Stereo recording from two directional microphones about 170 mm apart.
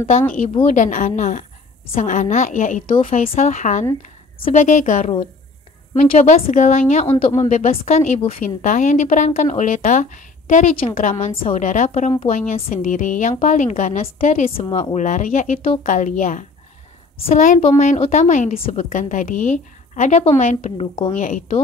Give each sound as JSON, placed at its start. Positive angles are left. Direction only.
{"t": 0.4, "sound": "a woman's voice", "side_deg": 45}
{"t": 21.1, "sound": "a woman's voice", "side_deg": 50}